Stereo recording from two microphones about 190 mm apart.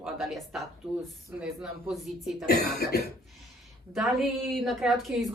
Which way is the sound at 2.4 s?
55° left (ahead or behind).